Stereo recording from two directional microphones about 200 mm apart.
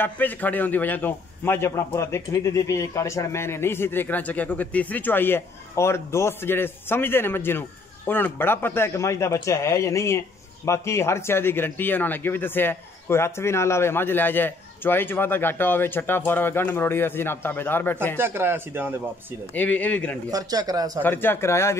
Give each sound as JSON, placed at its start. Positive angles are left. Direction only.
{"t": 0.0, "sound": "speech", "side_deg": 10}
{"t": 18.1, "sound": "a man's voice", "side_deg": -10}
{"t": 19.5, "sound": "speech", "side_deg": 10}
{"t": 20.2, "sound": "a man's voice", "side_deg": -20}
{"t": 21.0, "sound": "speech", "side_deg": 10}